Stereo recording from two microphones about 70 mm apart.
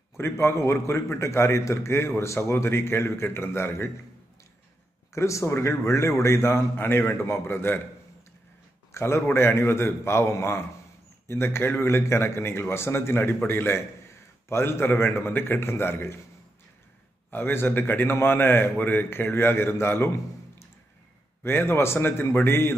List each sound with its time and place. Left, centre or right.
0.2 s a man's voice: left
5.1 s a man's voice: left
8.9 s a man's voice: left
17.3 s a man's voice: left
21.4 s a man's voice: left